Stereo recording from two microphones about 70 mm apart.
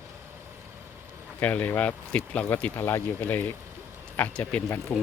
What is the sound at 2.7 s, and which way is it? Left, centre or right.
Speech, left.